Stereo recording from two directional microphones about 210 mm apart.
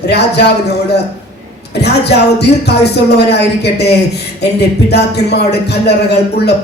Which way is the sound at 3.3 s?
50° left (ahead or behind).